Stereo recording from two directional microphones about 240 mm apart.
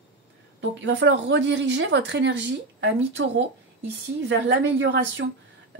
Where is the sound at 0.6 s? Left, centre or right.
Right.